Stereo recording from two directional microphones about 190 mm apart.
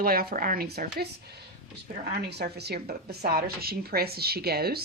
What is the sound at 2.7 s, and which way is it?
A woman's voice, 55° right (ahead or behind).